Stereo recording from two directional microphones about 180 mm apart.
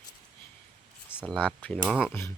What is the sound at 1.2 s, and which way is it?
Speech, 5° left (ahead or behind).